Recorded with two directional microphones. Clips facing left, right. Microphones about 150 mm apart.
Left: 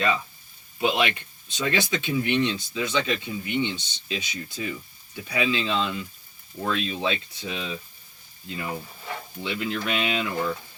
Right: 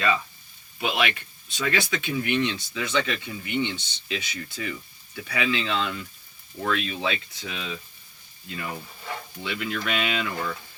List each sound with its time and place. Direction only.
0.8 s speech: 25° left (ahead or behind)
8.4 s speech: 15° left (ahead or behind)